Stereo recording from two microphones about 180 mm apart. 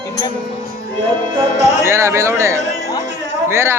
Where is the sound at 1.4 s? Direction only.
15° right (ahead or behind).